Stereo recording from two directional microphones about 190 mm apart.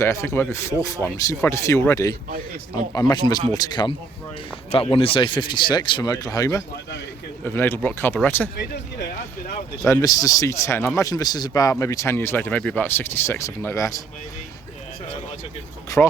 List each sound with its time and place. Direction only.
0.0 s a man's voice: 15° left (ahead or behind)
8.5 s speech: 60° left (ahead or behind)
9.9 s a man's voice: 20° left (ahead or behind)
15.9 s speech: 20° left (ahead or behind)